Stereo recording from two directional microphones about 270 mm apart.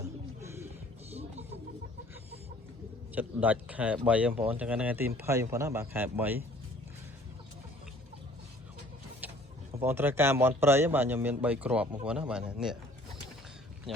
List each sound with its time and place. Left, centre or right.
0.4 s music: centre
3.2 s speech: centre
9.2 s vehicle: centre
9.8 s speech: centre